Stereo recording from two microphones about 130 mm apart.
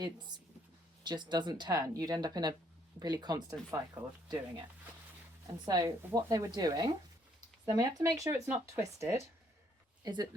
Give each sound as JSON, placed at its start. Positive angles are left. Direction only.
{"t": 1.0, "sound": "speech", "side_deg": -35}
{"t": 4.0, "sound": "speech", "side_deg": -15}
{"t": 5.6, "sound": "speech", "side_deg": -30}